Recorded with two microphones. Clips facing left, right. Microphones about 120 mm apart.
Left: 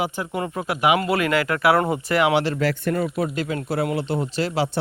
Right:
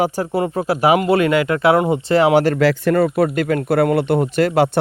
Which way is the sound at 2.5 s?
85° right.